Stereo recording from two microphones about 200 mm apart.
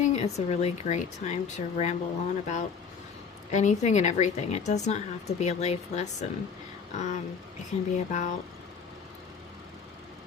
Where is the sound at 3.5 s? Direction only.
35° left (ahead or behind).